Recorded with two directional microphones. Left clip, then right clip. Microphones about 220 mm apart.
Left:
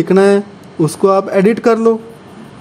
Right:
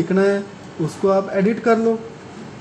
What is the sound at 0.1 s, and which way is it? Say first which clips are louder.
Speech: left 9 dB; 50° left (ahead or behind).